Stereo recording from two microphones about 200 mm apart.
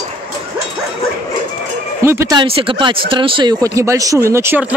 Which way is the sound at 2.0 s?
15° right (ahead or behind).